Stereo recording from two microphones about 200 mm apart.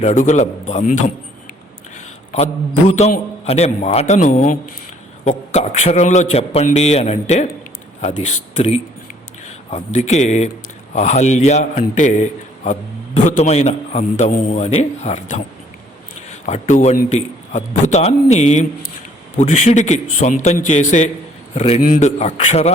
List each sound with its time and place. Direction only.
0.0 s a man's voice: 35° left (ahead or behind)
2.9 s a man's voice: 35° left (ahead or behind)
13.2 s a man's voice: 35° left (ahead or behind)
16.5 s a man's voice: 35° left (ahead or behind)